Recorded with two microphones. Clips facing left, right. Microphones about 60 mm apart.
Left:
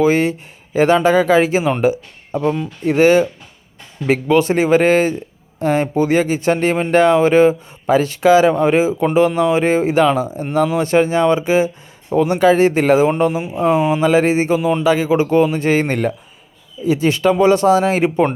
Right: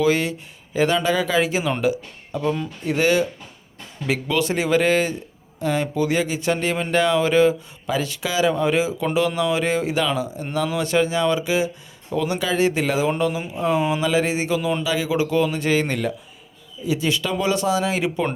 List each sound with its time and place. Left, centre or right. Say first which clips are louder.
0.0 s speech: left 5 dB; left